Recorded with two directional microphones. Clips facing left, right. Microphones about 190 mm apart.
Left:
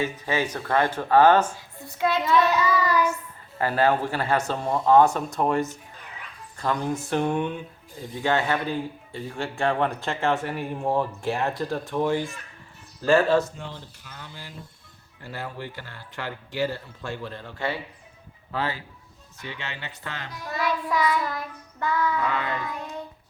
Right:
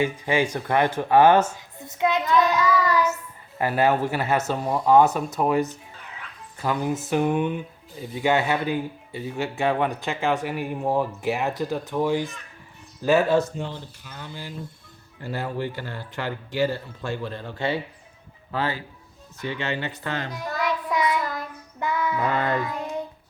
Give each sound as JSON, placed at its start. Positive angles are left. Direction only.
{"t": 0.0, "sound": "speech", "side_deg": -15}
{"t": 1.8, "sound": "child singing", "side_deg": -20}
{"t": 2.2, "sound": "child singing", "side_deg": 5}
{"t": 3.6, "sound": "speech", "side_deg": -15}
{"t": 11.5, "sound": "speech", "side_deg": -15}
{"t": 11.9, "sound": "speech", "side_deg": 0}
{"t": 15.2, "sound": "speech", "side_deg": -30}
{"t": 18.5, "sound": "speech", "side_deg": -45}
{"t": 20.6, "sound": "speech", "side_deg": -20}
{"t": 21.2, "sound": "speech", "side_deg": 0}
{"t": 21.8, "sound": "speech", "side_deg": -20}
{"t": 22.2, "sound": "speech", "side_deg": -45}
{"t": 22.6, "sound": "speech", "side_deg": -20}